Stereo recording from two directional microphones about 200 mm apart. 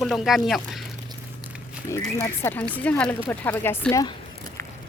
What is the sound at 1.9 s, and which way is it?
Speech, 15° left (ahead or behind).